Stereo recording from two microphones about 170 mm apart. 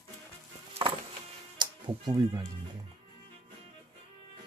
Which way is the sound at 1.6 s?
25° right (ahead or behind).